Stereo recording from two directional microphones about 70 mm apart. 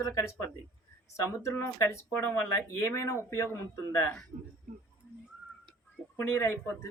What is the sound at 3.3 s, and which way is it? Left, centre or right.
Speech, left.